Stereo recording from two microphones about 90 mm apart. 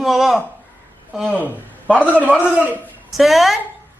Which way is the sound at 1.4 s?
20° right (ahead or behind).